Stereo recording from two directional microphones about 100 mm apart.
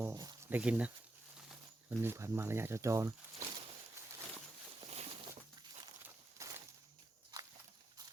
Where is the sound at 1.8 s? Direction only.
25° right (ahead or behind).